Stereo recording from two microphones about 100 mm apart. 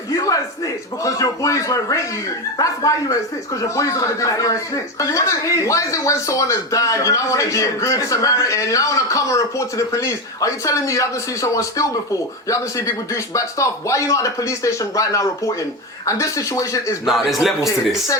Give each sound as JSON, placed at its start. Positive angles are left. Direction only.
{"t": 0.1, "sound": "a sound", "side_deg": 30}
{"t": 1.0, "sound": "speech", "side_deg": 35}
{"t": 17.1, "sound": "a man's voice", "side_deg": 0}